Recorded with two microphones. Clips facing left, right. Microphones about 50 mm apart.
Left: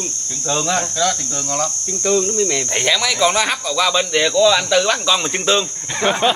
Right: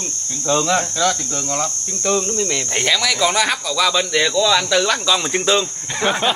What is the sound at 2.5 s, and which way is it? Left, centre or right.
Speech, centre.